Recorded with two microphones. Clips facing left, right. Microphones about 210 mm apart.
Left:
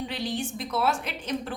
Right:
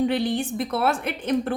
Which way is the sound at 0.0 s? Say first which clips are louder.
Right 8 dB; 55° right (ahead or behind).